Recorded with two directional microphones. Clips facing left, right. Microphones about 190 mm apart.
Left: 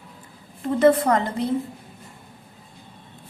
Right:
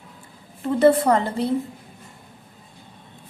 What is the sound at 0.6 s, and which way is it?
Speech, 30° right (ahead or behind).